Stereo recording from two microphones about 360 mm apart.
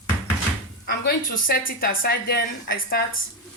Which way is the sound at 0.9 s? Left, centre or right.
Left.